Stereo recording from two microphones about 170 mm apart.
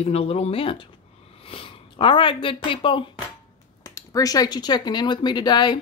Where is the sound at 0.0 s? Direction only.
35° left (ahead or behind).